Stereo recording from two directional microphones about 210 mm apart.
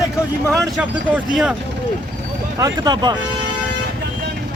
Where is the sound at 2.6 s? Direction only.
20° right (ahead or behind).